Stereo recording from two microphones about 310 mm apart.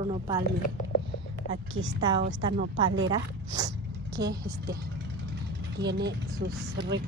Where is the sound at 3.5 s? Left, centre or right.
Centre.